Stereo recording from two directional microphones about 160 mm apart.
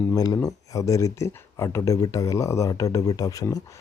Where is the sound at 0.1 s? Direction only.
25° left (ahead or behind).